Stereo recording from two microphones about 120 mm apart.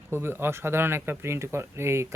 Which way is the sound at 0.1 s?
20° right (ahead or behind).